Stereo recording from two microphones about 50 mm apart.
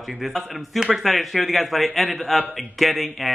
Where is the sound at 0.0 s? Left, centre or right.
Centre.